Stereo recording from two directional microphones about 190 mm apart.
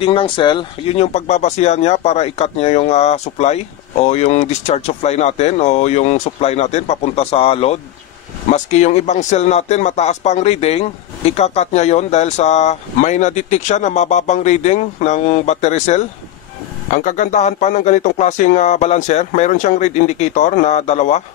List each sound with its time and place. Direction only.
0.0 s speech: 30° left (ahead or behind)